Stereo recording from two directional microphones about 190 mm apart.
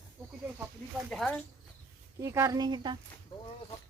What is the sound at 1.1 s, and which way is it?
Speech, 5° left (ahead or behind).